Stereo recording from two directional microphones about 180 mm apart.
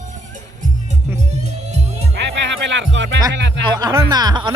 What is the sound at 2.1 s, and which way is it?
Music, 80° right.